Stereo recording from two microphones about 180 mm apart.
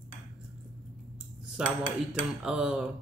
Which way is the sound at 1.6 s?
5° right (ahead or behind).